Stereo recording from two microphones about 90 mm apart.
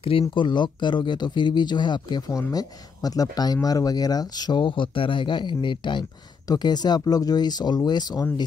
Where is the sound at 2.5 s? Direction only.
45° left (ahead or behind); by 6.0 s 60° left (ahead or behind).